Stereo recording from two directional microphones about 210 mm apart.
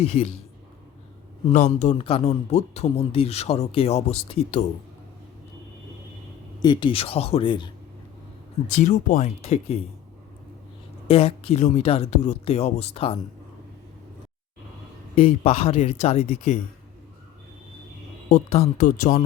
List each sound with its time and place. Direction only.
0.0 s speech: 30° left (ahead or behind)
1.5 s speech: 35° left (ahead or behind)
6.6 s speech: 20° left (ahead or behind)
8.6 s speech: 35° left (ahead or behind)
11.1 s speech: 25° left (ahead or behind)
15.2 s speech: 30° left (ahead or behind)
18.3 s speech: 30° left (ahead or behind)